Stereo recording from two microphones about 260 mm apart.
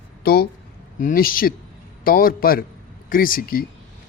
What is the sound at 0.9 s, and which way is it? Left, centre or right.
A man's voice, left.